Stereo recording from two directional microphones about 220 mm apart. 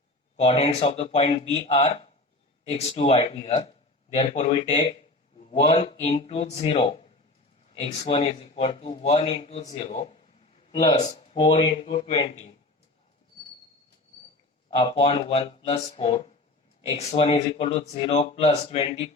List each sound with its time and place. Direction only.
0.3 s speech: 30° left (ahead or behind)
14.8 s speech: 25° left (ahead or behind)